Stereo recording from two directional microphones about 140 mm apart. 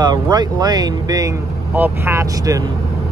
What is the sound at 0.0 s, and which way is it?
Speech, 30° right (ahead or behind).